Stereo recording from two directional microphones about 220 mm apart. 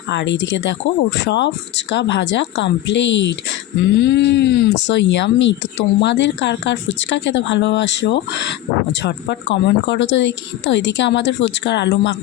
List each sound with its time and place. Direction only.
0.1 s speech: 55° left (ahead or behind)